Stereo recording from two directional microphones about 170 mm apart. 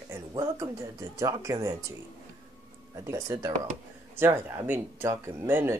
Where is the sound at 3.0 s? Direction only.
20° right (ahead or behind).